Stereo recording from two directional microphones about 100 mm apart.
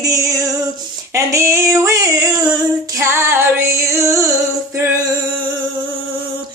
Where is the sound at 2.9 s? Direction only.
25° right (ahead or behind).